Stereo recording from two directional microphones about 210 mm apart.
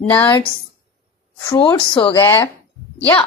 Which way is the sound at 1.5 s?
20° left (ahead or behind).